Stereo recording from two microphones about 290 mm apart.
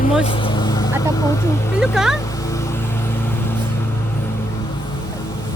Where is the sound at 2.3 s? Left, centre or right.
Centre.